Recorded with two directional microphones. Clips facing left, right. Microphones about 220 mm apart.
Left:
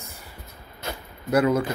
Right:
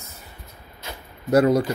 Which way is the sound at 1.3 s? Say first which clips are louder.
Right 3 dB; 40° right (ahead or behind).